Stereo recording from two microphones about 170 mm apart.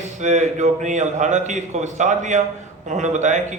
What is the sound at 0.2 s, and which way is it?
A man's voice, 45° right (ahead or behind).